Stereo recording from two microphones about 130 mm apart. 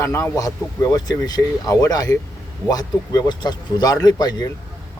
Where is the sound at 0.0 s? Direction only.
20° left (ahead or behind).